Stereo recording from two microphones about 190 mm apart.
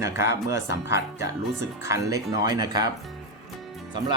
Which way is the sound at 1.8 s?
15° right (ahead or behind).